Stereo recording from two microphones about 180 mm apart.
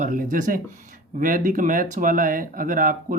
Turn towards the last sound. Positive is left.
turn(degrees=-50)  # may be behind; listen again after turning